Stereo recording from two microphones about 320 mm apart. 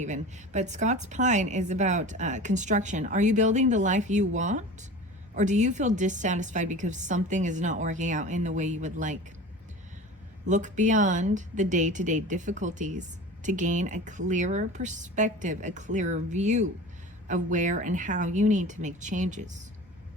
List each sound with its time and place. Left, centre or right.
0.0 s a woman's voice: right
10.4 s a woman's voice: right